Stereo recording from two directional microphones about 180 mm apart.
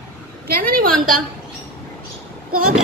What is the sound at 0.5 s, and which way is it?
Speech, 55° right (ahead or behind).